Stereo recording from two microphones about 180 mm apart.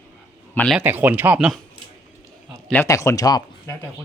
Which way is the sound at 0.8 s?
10° right (ahead or behind).